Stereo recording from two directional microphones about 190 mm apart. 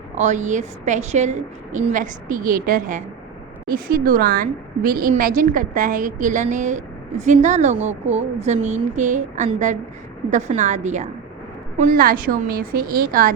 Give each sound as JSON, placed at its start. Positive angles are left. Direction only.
{"t": 0.2, "sound": "a woman's voice", "side_deg": -40}